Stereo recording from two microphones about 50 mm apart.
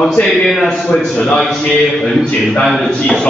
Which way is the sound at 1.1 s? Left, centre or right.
Left.